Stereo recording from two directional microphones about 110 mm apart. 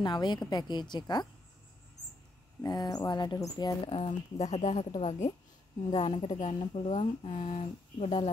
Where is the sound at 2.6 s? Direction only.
35° left (ahead or behind).